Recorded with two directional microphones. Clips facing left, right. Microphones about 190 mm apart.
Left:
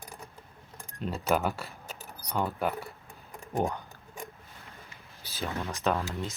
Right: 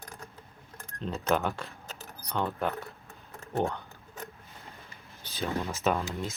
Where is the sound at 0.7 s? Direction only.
10° left (ahead or behind).